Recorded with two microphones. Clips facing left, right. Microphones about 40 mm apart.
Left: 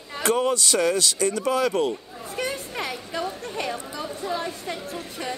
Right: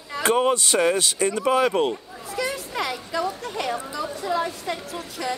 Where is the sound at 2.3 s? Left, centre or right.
Right.